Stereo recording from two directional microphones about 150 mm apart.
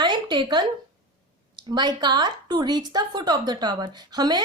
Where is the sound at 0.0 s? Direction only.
30° right (ahead or behind).